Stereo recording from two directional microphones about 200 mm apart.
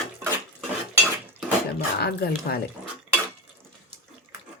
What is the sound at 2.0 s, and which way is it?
Speech, 50° left (ahead or behind).